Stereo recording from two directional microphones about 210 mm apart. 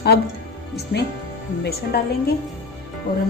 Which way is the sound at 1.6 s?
50° left (ahead or behind).